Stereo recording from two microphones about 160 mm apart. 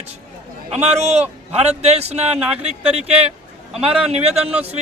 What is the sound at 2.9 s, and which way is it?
Speech, 40° right (ahead or behind).